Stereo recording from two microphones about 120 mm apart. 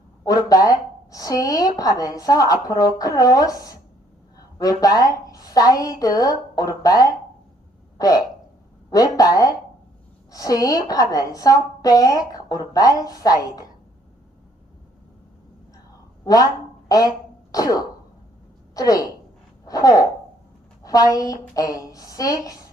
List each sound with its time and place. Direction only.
0.3 s a woman's voice: 30° left (ahead or behind)
16.2 s a woman's voice: 30° left (ahead or behind)
19.6 s a sound: 30° left (ahead or behind)
20.8 s a woman's voice: 30° left (ahead or behind)